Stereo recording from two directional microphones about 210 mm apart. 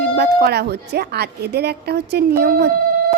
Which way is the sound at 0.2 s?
50° right (ahead or behind).